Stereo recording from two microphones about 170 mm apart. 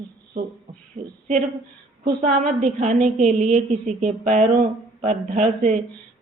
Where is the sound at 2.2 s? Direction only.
45° right (ahead or behind).